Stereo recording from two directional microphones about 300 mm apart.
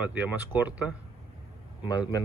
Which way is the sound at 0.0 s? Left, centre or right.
Centre.